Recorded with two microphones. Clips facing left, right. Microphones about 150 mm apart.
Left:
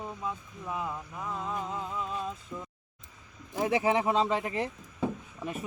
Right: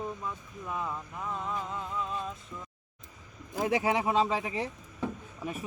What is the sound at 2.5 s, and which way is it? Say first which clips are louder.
Speech: left 4 dB; 20° left (ahead or behind).